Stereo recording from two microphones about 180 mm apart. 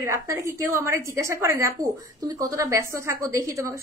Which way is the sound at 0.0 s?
15° right (ahead or behind).